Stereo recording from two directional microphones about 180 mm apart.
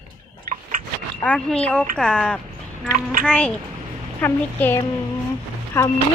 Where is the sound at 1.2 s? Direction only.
5° left (ahead or behind).